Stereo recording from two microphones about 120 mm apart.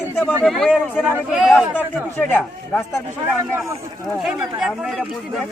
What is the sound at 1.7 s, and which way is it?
Speech, 15° left (ahead or behind).